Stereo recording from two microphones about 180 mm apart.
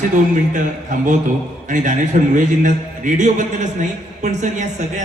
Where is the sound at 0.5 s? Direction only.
45° right (ahead or behind).